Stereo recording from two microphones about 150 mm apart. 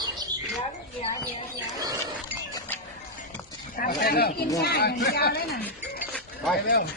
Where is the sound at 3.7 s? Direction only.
75° left (ahead or behind).